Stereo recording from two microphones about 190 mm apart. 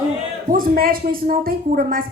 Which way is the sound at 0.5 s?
50° right (ahead or behind).